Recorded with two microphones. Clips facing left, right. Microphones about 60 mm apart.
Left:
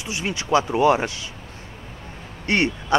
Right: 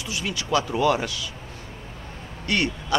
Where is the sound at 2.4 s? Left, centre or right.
Left.